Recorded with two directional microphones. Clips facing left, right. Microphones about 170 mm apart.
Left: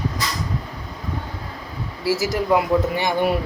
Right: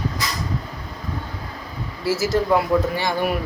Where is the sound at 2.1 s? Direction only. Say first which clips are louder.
Right 1 dB; 15° left (ahead or behind).